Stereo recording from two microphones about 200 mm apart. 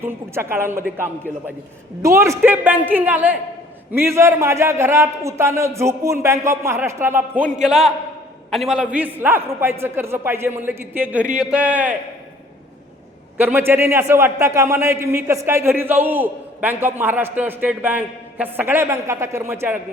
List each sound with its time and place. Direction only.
0.0 s a man's voice: 10° right (ahead or behind)
13.3 s a man's voice: 10° right (ahead or behind)